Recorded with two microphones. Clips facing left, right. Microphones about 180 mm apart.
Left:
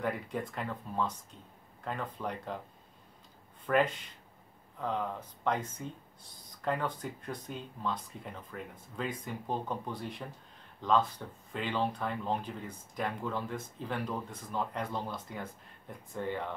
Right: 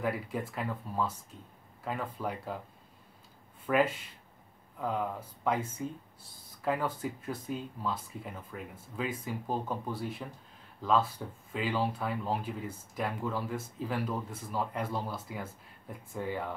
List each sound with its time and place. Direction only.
0.0 s speech: 5° right (ahead or behind)
3.6 s speech: 5° right (ahead or behind)